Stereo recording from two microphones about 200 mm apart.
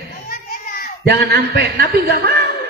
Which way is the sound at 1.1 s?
55° right (ahead or behind).